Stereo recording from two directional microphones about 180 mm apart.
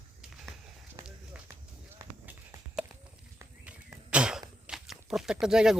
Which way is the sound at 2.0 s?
15° right (ahead or behind).